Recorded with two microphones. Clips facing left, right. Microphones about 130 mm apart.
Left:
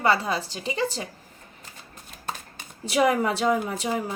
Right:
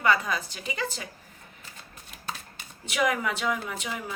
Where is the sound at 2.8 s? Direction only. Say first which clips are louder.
Left 5 dB; 35° left (ahead or behind).